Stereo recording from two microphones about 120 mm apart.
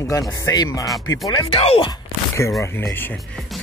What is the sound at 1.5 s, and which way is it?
Speech, 55° left (ahead or behind).